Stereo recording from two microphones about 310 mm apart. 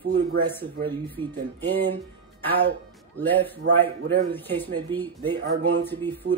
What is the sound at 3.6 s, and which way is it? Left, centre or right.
Speech, right.